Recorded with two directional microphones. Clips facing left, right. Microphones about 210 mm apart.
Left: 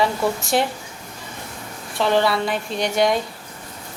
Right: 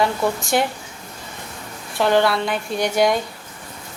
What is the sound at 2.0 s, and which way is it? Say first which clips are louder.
A woman's voice: right 1 dB; centre (ahead or behind).